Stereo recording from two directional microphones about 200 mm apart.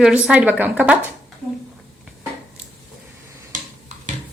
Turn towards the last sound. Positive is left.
turn(degrees=-40)  # may be behind; listen again after turning